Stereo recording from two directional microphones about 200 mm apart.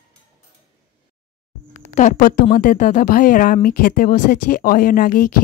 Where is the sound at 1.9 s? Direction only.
40° left (ahead or behind).